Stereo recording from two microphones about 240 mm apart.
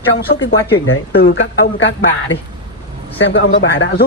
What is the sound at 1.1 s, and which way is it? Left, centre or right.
Speech, left.